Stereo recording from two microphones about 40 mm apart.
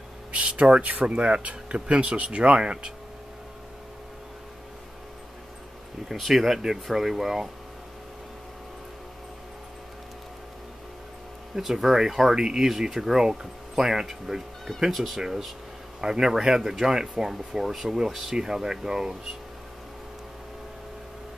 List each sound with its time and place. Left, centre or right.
0.3 s speech: right
6.0 s speech: centre
11.5 s speech: centre
12.4 s speech: centre
14.8 s speech: centre
16.0 s speech: centre